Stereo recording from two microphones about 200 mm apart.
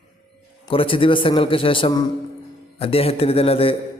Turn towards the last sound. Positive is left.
turn(degrees=30)  # may be behind; listen again after turning